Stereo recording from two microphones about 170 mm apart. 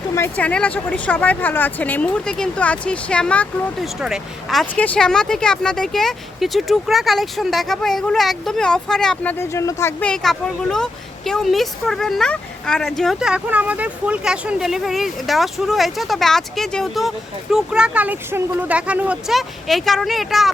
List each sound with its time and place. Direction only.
0.1 s speech: 10° left (ahead or behind)
9.4 s speech: 15° left (ahead or behind); by 20.5 s centre (ahead or behind)